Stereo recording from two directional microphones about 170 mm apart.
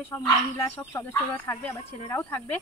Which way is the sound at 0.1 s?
15° left (ahead or behind).